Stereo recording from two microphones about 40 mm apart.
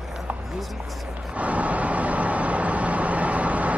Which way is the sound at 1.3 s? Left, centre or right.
Right.